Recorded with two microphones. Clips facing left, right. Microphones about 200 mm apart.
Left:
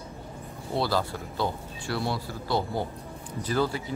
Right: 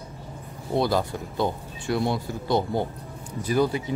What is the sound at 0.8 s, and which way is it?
Speech, 20° right (ahead or behind).